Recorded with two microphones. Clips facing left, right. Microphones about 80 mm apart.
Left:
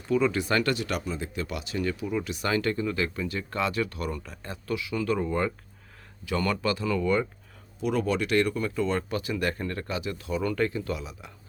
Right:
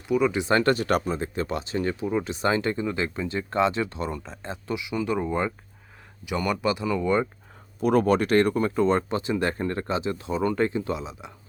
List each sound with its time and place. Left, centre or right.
0.1 s speech: centre
7.8 s speech: right